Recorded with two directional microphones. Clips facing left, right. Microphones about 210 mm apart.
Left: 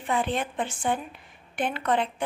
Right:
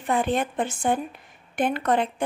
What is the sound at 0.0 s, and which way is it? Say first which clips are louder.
A woman's voice: right 4 dB; 45° right (ahead or behind).